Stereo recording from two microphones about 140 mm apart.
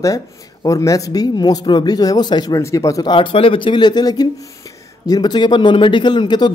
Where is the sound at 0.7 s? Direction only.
25° left (ahead or behind).